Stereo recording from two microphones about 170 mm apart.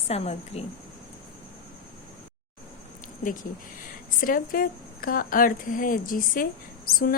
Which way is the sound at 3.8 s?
55° left (ahead or behind).